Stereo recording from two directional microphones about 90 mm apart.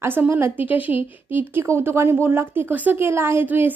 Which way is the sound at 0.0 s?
25° right (ahead or behind).